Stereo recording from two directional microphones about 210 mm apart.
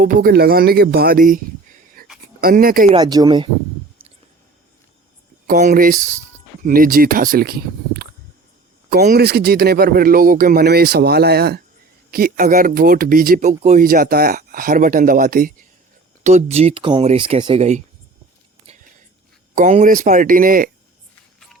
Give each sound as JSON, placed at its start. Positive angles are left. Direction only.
{"t": 0.0, "sound": "speech", "side_deg": -45}
{"t": 2.9, "sound": "speech", "side_deg": -20}
{"t": 5.5, "sound": "speech", "side_deg": -40}
{"t": 16.2, "sound": "speech", "side_deg": -30}
{"t": 19.5, "sound": "speech", "side_deg": -40}